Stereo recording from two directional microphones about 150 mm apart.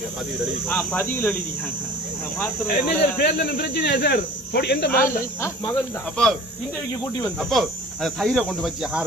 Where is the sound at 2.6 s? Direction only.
80° left.